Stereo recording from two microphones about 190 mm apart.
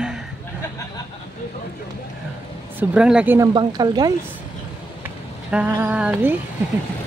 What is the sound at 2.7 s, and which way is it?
Speech, 5° right (ahead or behind).